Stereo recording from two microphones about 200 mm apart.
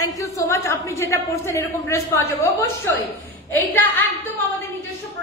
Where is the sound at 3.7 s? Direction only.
10° left (ahead or behind).